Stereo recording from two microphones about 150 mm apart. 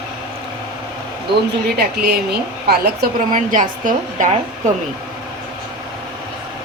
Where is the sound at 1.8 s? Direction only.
90° right.